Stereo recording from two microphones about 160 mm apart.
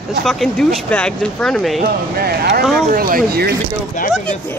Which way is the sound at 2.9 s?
65° right (ahead or behind).